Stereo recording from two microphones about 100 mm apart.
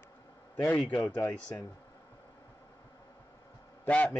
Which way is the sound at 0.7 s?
15° left (ahead or behind).